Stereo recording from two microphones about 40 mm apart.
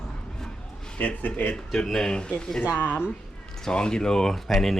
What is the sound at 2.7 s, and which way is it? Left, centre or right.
Speech, left.